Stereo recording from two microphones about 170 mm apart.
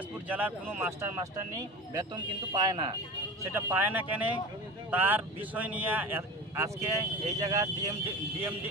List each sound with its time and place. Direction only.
0.3 s speech: 10° right (ahead or behind); by 3.0 s 25° right (ahead or behind)
3.5 s speech: 15° right (ahead or behind)